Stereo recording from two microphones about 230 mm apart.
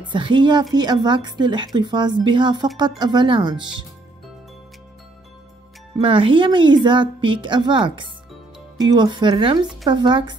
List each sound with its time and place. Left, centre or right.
0.1 s a woman's voice: right
5.9 s a woman's voice: right